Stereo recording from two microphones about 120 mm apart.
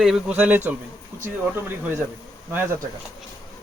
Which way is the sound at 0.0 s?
5° right (ahead or behind).